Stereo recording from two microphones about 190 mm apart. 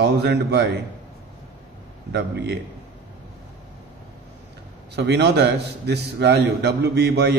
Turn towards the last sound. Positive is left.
turn(degrees=-60)  # may be behind; listen again after turning